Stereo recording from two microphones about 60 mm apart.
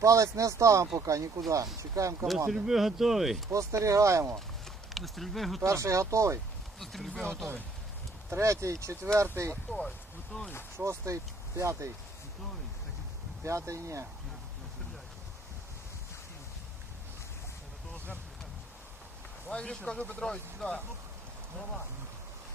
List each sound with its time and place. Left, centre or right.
0.0 s speech: right
2.6 s speech: centre
3.5 s speech: right
4.9 s speech: centre
5.6 s speech: right
6.7 s speech: centre
8.3 s speech: right
9.5 s speech: centre
10.8 s speech: right
13.4 s speech: right
19.5 s speech: centre